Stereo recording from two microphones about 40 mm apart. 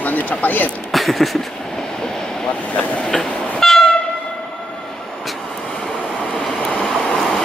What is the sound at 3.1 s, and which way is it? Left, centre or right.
Train, centre.